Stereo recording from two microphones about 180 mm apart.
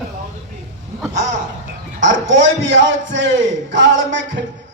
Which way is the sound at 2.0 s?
90° right.